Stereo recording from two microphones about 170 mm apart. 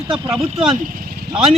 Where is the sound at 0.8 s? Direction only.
55° right (ahead or behind).